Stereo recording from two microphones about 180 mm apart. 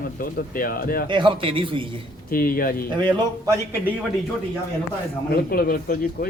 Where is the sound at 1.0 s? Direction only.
25° right (ahead or behind).